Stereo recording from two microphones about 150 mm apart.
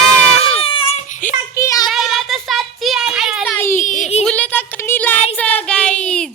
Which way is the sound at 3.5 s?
15° left (ahead or behind).